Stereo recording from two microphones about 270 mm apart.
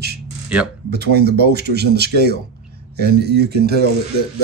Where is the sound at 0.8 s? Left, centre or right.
Right.